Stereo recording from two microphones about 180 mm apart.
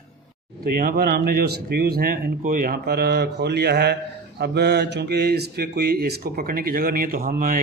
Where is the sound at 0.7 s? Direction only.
55° right (ahead or behind).